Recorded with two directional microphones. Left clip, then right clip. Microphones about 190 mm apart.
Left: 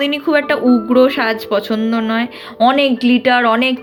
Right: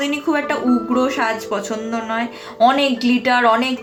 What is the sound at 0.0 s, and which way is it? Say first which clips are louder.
Speech: left 5 dB; 45° left (ahead or behind).